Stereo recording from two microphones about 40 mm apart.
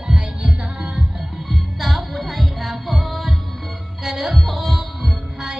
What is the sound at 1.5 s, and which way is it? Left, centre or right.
Music, centre.